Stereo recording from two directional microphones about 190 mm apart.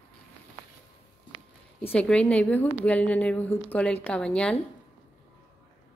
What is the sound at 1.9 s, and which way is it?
A woman's voice, 5° left (ahead or behind).